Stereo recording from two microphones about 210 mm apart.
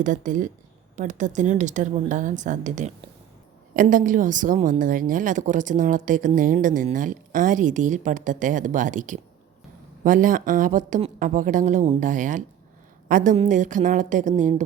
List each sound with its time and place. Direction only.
0.0 s a woman's voice: 40° right (ahead or behind)